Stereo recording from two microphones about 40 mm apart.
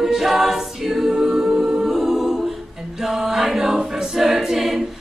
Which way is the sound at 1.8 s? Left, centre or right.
Centre.